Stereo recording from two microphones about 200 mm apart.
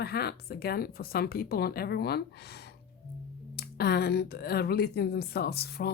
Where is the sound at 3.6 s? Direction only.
50° left (ahead or behind).